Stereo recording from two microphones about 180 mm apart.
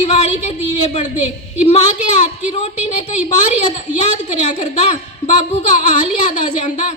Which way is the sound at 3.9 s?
40° left (ahead or behind).